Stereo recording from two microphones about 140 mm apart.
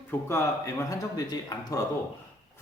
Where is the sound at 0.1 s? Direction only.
20° left (ahead or behind).